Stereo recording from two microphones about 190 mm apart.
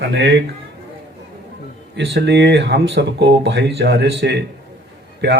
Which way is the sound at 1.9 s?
65° right (ahead or behind).